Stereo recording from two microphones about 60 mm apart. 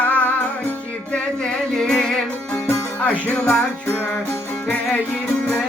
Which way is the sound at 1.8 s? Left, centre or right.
Centre.